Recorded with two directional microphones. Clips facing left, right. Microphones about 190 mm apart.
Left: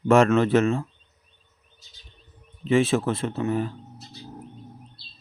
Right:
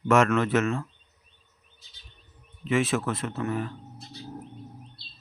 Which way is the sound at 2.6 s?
30° left (ahead or behind).